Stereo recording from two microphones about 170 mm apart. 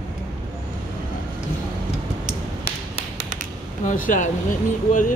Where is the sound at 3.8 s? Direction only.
50° left (ahead or behind).